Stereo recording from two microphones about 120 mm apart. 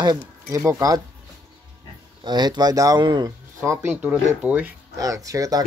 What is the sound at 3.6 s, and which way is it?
Speech, 25° right (ahead or behind).